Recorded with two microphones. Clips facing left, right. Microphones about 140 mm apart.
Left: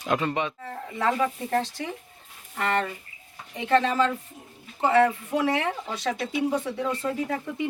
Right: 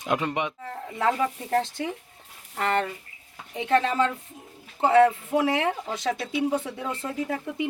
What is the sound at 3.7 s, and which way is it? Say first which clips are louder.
Speech: left 1 dB; 15° right (ahead or behind).